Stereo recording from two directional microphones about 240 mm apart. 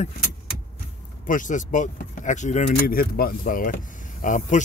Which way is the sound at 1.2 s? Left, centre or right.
Left.